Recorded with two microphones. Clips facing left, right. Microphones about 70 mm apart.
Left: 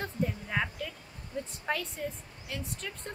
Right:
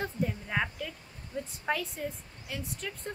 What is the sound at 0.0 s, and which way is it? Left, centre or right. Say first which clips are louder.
A woman's voice: right 1 dB; centre.